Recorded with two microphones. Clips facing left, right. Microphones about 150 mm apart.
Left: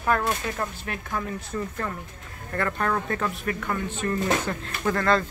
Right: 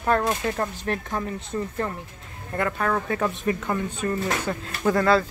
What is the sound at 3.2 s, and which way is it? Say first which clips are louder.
Speech: right 3 dB; 25° right (ahead or behind).